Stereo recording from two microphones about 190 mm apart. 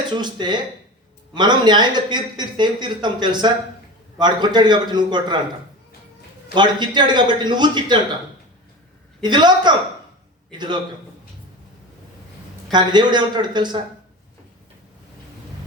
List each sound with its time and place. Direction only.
0.1 s speech: 25° right (ahead or behind)
6.5 s speech: 25° right (ahead or behind)
9.2 s speech: 25° right (ahead or behind)
12.7 s speech: 25° right (ahead or behind)